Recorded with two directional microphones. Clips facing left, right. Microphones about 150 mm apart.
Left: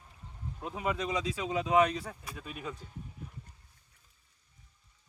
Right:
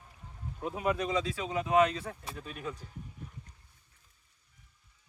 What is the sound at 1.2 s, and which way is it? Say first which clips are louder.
Speech: left 1 dB; 20° left (ahead or behind).